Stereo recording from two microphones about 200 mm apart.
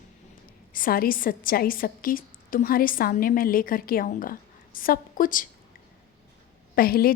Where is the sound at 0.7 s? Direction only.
45° left (ahead or behind).